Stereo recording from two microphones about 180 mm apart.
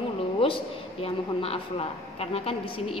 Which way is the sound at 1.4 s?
35° left (ahead or behind).